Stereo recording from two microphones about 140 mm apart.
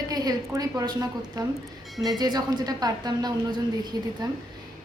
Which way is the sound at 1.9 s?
Centre (ahead or behind).